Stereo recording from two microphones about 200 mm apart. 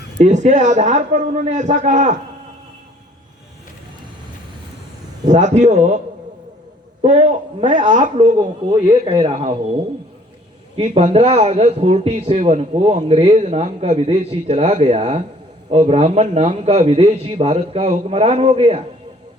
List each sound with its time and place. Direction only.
0.2 s a man's voice: 35° right (ahead or behind)
5.3 s a man's voice: 35° right (ahead or behind)
7.0 s a man's voice: 35° right (ahead or behind)
8.4 s a man's voice: 20° right (ahead or behind)
10.8 s a man's voice: 35° right (ahead or behind)